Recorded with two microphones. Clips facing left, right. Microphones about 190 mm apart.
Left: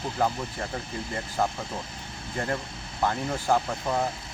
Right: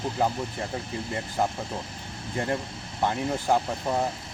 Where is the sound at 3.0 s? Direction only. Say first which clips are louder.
Right 1 dB; 20° right (ahead or behind).